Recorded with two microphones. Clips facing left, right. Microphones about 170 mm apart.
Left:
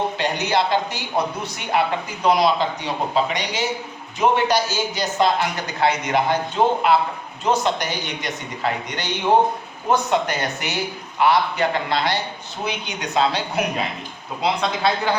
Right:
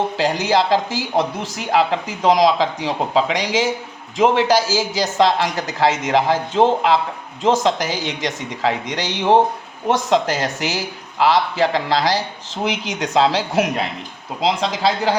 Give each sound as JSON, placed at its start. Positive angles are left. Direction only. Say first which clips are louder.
{"t": 0.2, "sound": "a man's voice", "louder": "right 6 dB", "side_deg": -90}
{"t": 14.4, "sound": "speech", "louder": "right 2 dB", "side_deg": -80}